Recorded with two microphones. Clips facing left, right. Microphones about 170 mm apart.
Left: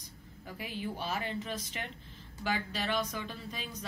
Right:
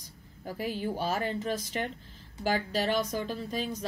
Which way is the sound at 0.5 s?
40° right (ahead or behind).